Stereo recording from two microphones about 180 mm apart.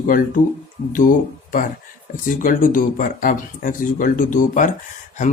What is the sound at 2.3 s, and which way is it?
Speech, 50° left (ahead or behind).